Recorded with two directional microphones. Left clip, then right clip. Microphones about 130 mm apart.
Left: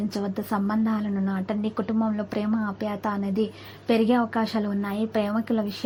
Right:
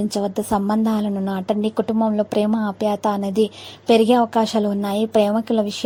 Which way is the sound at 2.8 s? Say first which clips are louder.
Right 8 dB; 55° right (ahead or behind).